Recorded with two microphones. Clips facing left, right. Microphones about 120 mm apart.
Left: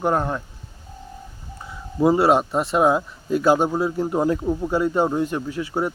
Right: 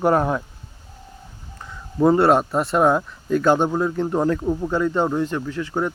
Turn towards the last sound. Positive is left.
turn(degrees=10)  # may be behind; listen again after turning